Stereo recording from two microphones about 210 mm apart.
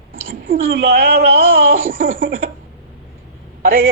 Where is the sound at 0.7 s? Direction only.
45° right (ahead or behind).